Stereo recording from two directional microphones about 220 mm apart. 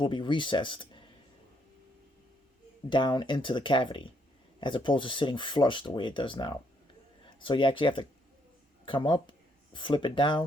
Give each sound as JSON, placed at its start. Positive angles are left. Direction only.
{"t": 0.0, "sound": "speech", "side_deg": 20}
{"t": 2.9, "sound": "speech", "side_deg": 20}